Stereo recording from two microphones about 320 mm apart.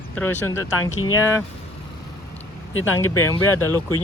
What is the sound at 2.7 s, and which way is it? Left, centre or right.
Speech, left.